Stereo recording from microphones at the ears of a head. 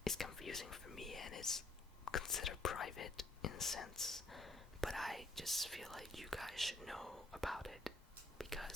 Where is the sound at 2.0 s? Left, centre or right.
Left.